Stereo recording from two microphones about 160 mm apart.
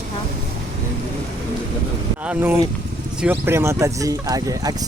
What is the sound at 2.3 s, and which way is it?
Speech, 10° right (ahead or behind).